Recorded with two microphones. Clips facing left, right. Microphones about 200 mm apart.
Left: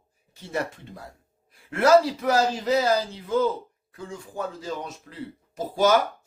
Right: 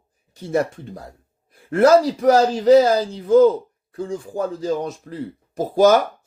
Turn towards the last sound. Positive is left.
turn(degrees=-45)  # may be behind; listen again after turning